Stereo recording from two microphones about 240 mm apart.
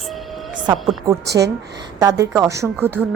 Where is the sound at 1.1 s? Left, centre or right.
Centre.